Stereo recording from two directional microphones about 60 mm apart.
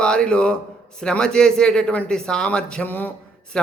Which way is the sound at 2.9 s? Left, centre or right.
Left.